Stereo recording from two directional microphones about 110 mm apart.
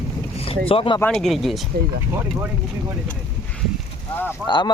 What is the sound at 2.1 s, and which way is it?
Speech, 20° right (ahead or behind).